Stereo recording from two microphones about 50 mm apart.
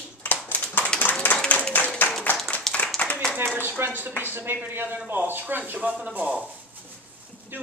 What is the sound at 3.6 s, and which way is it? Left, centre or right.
Speech, right.